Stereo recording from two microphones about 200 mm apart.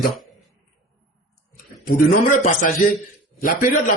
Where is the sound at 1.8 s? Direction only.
40° left (ahead or behind).